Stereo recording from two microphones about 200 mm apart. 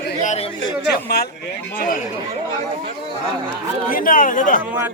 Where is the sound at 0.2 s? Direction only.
35° left (ahead or behind).